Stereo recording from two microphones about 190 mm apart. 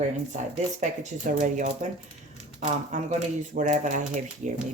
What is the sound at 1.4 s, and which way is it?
Speech, 40° right (ahead or behind).